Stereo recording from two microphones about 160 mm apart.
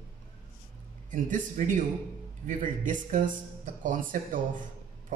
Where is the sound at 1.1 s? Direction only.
55° right (ahead or behind).